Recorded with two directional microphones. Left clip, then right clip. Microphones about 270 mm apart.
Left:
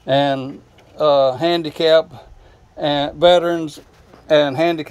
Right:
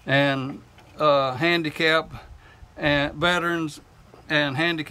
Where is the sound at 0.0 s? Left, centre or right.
Right.